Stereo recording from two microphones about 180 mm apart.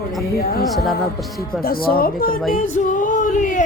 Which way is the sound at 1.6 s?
55° left (ahead or behind).